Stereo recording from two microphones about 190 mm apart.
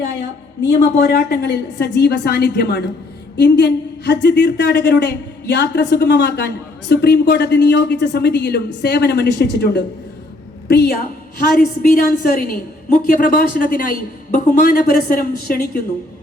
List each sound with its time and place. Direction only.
0.2 s a woman's voice: 70° left (ahead or behind); by 15.8 s 55° left (ahead or behind)